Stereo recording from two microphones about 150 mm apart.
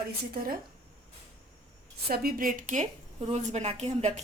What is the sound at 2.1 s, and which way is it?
A woman's voice, 90° right.